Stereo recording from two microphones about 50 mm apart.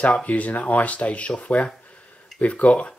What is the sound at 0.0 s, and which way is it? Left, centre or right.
Speech, left.